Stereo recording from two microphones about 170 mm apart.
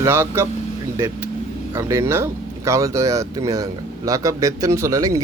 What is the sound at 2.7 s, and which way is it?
Speech, 15° right (ahead or behind).